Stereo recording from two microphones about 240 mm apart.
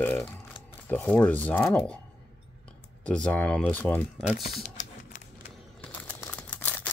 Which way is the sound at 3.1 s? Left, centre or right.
Centre.